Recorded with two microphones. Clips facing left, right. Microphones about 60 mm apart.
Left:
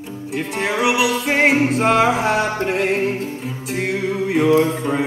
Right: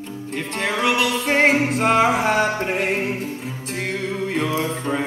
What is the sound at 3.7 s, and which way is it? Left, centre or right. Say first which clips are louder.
Music: left 4 dB; centre.